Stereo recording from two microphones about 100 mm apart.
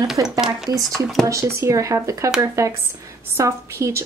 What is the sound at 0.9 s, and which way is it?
Speech, 5° left (ahead or behind).